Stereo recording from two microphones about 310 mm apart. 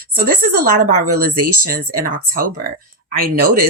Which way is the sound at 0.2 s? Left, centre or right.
Right.